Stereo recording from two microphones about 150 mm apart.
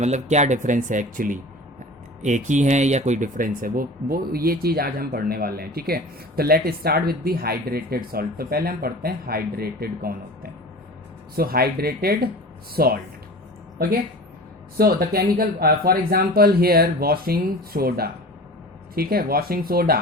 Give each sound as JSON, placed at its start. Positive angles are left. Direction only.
{"t": 0.0, "sound": "speech", "side_deg": -50}
{"t": 14.8, "sound": "speech", "side_deg": -90}